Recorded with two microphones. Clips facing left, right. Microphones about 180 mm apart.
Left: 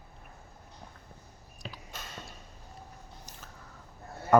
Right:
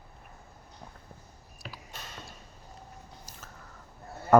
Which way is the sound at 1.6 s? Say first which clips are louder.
Left 1 dB; 25° left (ahead or behind).